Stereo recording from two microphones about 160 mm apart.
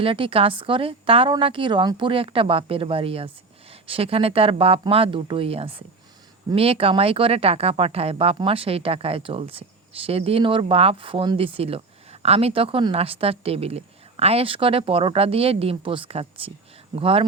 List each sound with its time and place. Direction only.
0.0 s speech: 35° right (ahead or behind)